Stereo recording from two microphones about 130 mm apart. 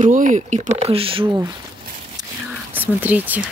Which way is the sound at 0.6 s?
50° right (ahead or behind).